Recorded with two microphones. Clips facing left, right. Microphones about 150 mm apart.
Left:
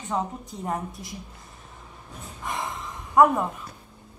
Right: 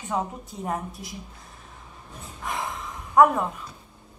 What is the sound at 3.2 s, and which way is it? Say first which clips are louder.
Speech: right 1 dB; centre (ahead or behind).